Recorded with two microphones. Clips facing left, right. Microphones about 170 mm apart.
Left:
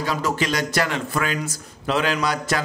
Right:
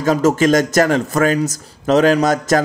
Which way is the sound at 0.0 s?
45° right (ahead or behind).